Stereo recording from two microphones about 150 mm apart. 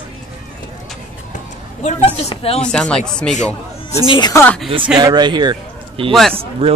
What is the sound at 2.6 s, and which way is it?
Speech, 5° left (ahead or behind).